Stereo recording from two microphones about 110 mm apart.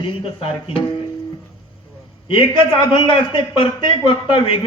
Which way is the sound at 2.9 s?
50° left (ahead or behind).